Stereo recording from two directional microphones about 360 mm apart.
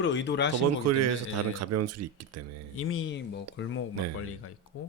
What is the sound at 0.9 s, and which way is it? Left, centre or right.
Speech, right.